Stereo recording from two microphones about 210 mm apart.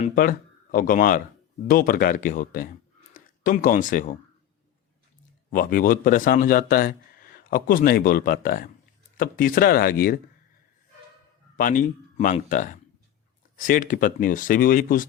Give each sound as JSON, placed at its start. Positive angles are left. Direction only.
{"t": 0.0, "sound": "speech", "side_deg": 40}
{"t": 5.5, "sound": "speech", "side_deg": 45}
{"t": 11.5, "sound": "speech", "side_deg": 40}